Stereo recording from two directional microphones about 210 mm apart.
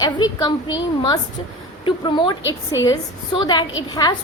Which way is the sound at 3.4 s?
20° left (ahead or behind).